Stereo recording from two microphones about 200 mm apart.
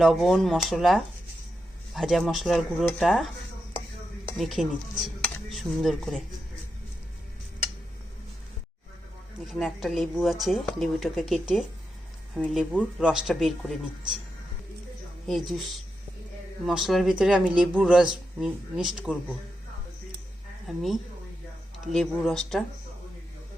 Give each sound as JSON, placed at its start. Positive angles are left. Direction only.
{"t": 0.0, "sound": "speech", "side_deg": 0}
{"t": 4.4, "sound": "speech", "side_deg": 0}
{"t": 9.5, "sound": "speech", "side_deg": 0}
{"t": 15.3, "sound": "speech", "side_deg": 0}
{"t": 16.6, "sound": "speech", "side_deg": 0}
{"t": 20.7, "sound": "speech", "side_deg": 0}